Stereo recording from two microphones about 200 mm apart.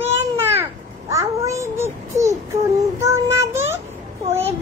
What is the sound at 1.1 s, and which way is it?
Babbling, 15° right (ahead or behind).